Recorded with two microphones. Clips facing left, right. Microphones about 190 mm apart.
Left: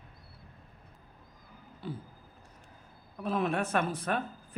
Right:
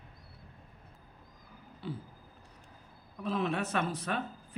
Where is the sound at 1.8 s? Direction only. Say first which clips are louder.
Even; 45° left (ahead or behind).